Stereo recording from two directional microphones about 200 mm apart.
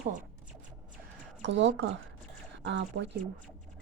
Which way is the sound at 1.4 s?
65° right (ahead or behind).